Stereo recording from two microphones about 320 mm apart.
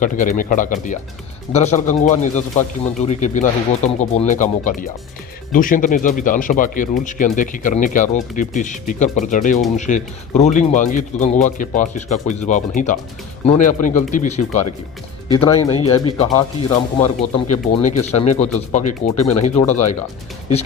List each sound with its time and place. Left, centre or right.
0.0 s speech: left